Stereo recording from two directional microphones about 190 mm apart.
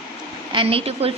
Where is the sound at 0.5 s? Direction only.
30° right (ahead or behind).